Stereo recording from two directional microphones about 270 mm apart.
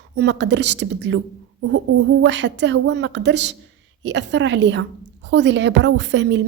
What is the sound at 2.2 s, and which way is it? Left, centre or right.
A woman's voice, right.